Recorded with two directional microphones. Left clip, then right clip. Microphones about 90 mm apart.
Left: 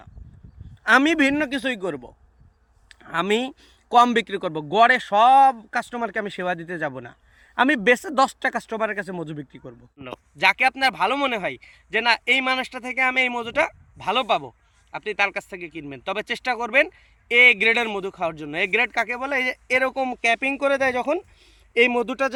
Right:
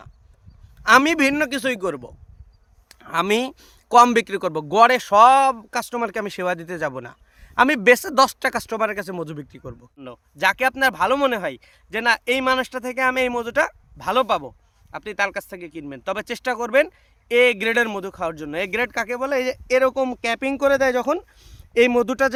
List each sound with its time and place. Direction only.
0.9 s speech: 45° right (ahead or behind)
1.3 s speech: 90° right
2.9 s a sound: 65° right (ahead or behind)
3.5 s speech: 90° right; by 21.2 s 65° right (ahead or behind)
22.0 s speech: 90° right